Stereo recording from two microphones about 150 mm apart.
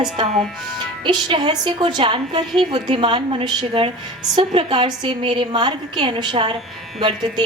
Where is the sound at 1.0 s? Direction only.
35° right (ahead or behind).